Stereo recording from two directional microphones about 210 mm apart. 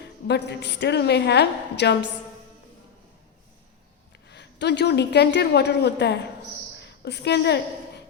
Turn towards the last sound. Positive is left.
turn(degrees=50)  # may be behind; listen again after turning